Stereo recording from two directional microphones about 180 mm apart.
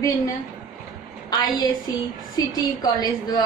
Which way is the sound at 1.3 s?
20° left (ahead or behind).